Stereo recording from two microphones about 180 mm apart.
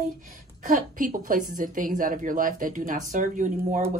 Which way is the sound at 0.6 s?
45° right (ahead or behind).